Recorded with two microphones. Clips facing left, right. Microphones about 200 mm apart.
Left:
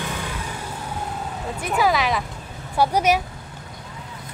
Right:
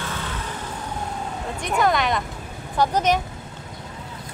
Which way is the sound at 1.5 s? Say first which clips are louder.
Even; 5° left (ahead or behind).